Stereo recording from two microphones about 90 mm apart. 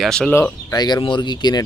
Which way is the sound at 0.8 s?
50° left (ahead or behind).